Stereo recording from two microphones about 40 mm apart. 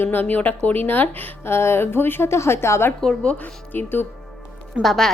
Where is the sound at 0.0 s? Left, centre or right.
Left.